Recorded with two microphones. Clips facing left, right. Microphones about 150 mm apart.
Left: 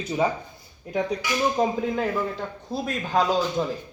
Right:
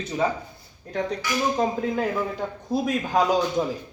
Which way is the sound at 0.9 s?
10° left (ahead or behind).